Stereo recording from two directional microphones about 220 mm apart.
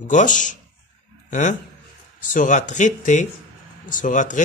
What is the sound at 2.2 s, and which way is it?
Speech, 35° left (ahead or behind).